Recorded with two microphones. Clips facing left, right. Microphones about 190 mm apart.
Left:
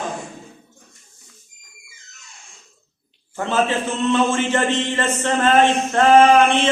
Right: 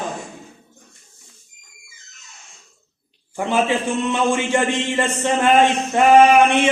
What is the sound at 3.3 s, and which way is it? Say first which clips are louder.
Speech: right 1 dB; 15° right (ahead or behind).